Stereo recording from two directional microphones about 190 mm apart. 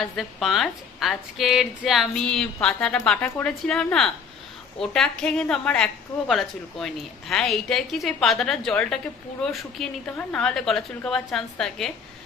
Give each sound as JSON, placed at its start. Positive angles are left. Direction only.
{"t": 0.0, "sound": "a woman's voice", "side_deg": 0}